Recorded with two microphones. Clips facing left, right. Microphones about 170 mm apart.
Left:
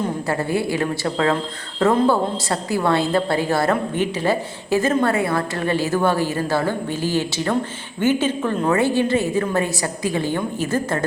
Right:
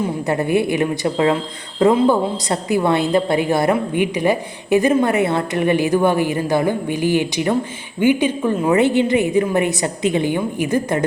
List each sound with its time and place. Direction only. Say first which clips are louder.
0.3 s a woman's voice: right 6 dB; 20° right (ahead or behind)